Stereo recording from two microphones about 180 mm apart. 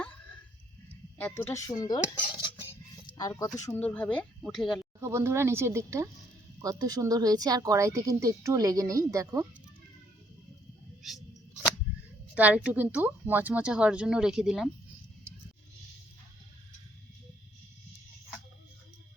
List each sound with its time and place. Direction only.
1.2 s cutlery: 15° left (ahead or behind)
3.6 s speech: 10° left (ahead or behind)
4.9 s a woman's voice: 15° right (ahead or behind)
11.0 s a sound: centre (ahead or behind)
12.3 s a woman's voice: 5° right (ahead or behind)